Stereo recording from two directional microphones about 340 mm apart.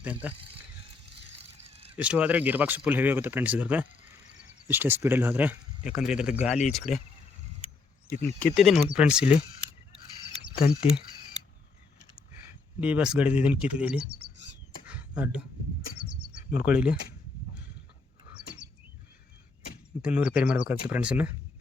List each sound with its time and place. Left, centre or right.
0.0 s speech: centre
1.6 s vehicle: centre
2.0 s speech: centre
8.1 s speech: left
8.5 s speech: centre
12.8 s speech: centre
14.8 s a sound: centre
16.0 s bird: centre
18.6 s bird: right
20.0 s speech: centre